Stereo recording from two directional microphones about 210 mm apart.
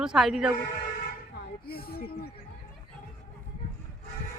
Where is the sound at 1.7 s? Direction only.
45° left (ahead or behind).